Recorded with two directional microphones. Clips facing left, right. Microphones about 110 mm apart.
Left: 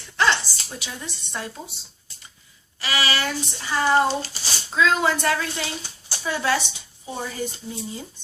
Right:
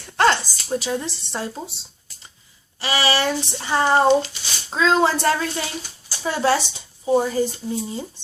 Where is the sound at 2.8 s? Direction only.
30° right (ahead or behind).